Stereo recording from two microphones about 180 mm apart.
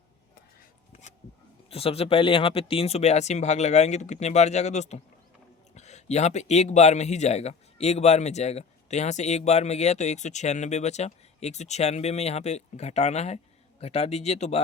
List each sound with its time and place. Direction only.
1.7 s speech: 30° left (ahead or behind)